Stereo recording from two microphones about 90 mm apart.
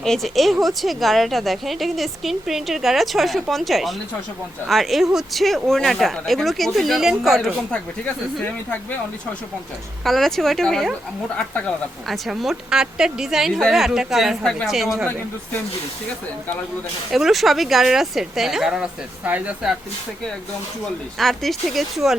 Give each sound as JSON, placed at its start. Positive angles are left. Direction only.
{"t": 0.0, "sound": "a woman's voice", "side_deg": 5}
{"t": 10.0, "sound": "a woman's voice", "side_deg": 0}
{"t": 12.0, "sound": "a woman's voice", "side_deg": 0}
{"t": 17.1, "sound": "a woman's voice", "side_deg": 0}
{"t": 21.2, "sound": "a woman's voice", "side_deg": 0}